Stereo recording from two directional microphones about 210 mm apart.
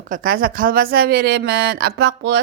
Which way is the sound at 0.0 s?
40° right (ahead or behind).